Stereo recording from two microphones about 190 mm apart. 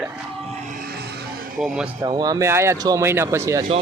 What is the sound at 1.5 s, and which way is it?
Speech, centre (ahead or behind).